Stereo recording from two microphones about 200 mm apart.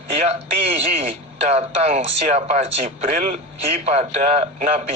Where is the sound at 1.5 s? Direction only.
35° right (ahead or behind).